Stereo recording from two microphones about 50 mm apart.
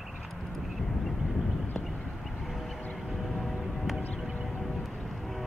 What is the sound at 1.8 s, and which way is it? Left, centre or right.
Horse, centre.